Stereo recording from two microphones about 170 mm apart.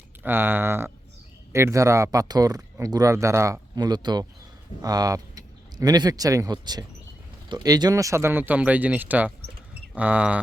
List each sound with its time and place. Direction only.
0.2 s speech: 15° right (ahead or behind)